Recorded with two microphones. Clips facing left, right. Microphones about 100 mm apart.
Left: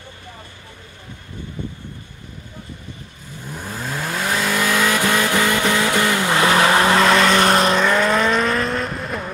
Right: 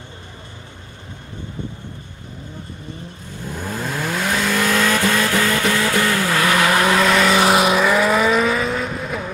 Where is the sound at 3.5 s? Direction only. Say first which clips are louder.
Right 2 dB; centre (ahead or behind); by 7.1 s 25° left (ahead or behind).